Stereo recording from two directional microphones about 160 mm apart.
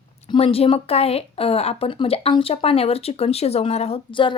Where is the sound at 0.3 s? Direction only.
35° left (ahead or behind).